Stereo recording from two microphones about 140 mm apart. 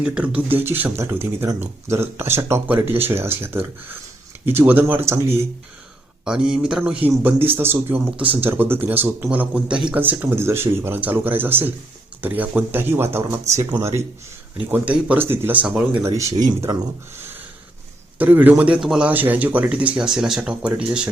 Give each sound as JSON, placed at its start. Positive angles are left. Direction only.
{"t": 0.0, "sound": "speech", "side_deg": -5}
{"t": 6.2, "sound": "a man's voice", "side_deg": -5}
{"t": 14.7, "sound": "speech", "side_deg": -10}
{"t": 16.0, "sound": "speech", "side_deg": -20}
{"t": 18.2, "sound": "speech", "side_deg": -10}